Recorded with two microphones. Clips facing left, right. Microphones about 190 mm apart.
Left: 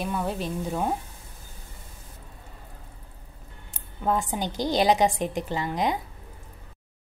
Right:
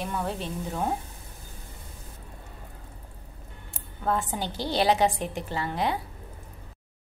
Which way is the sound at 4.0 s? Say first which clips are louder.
Left 2 dB; 15° left (ahead or behind).